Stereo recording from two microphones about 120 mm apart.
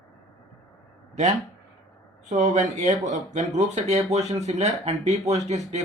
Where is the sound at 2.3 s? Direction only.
90° right.